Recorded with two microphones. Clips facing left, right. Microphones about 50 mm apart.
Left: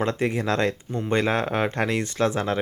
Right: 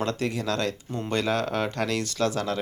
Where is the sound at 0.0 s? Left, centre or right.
Left.